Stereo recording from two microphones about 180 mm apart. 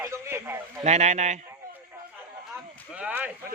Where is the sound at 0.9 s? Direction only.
40° right (ahead or behind).